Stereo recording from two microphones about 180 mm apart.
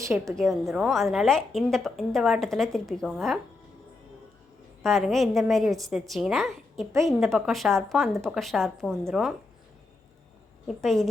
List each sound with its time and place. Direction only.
0.0 s a woman's voice: 15° right (ahead or behind)
0.3 s a woman's voice: centre (ahead or behind)
4.8 s a woman's voice: centre (ahead or behind)
10.8 s a woman's voice: centre (ahead or behind)